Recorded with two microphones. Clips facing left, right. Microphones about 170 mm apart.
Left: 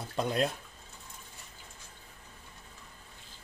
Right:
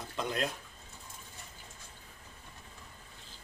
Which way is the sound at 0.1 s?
35° left (ahead or behind).